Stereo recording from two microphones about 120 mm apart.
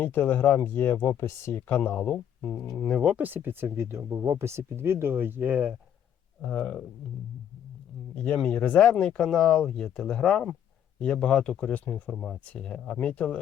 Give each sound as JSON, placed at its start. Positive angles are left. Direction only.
{"t": 0.0, "sound": "speech", "side_deg": 15}
{"t": 3.0, "sound": "speech", "side_deg": -10}
{"t": 6.5, "sound": "speech", "side_deg": 5}
{"t": 8.1, "sound": "speech", "side_deg": 10}